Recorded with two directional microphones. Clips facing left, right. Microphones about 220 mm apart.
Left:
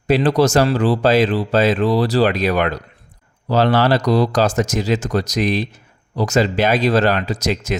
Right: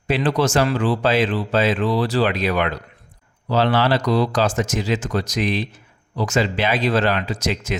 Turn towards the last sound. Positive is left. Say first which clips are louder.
# left 3 dB
turn(degrees=40)  # may be behind; listen again after turning